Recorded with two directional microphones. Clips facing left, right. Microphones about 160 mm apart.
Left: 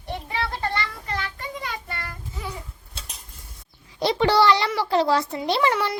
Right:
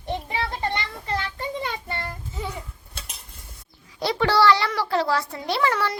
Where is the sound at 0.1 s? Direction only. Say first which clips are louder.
Right 1 dB; 20° right (ahead or behind).